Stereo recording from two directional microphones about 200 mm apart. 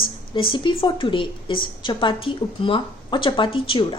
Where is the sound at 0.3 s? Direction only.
25° left (ahead or behind).